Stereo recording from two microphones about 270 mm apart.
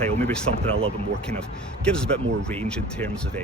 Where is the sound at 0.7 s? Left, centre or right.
Right.